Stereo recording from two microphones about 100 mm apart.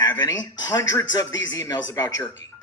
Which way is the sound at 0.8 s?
35° left (ahead or behind).